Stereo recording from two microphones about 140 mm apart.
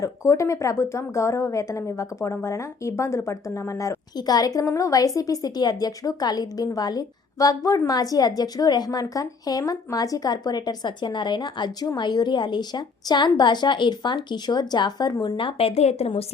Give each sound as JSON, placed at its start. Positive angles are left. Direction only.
{"t": 0.0, "sound": "a woman's voice", "side_deg": 20}
{"t": 15.4, "sound": "a woman's voice", "side_deg": 40}